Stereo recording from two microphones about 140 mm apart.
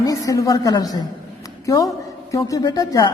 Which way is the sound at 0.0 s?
25° left (ahead or behind).